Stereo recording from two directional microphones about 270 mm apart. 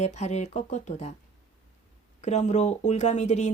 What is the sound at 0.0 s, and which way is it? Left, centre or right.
Speech, left.